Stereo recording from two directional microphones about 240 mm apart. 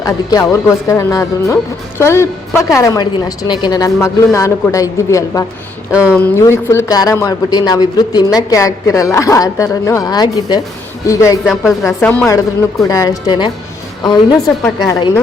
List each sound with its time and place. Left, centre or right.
0.0 s speech: centre
5.9 s speech: centre
6.1 s speech: centre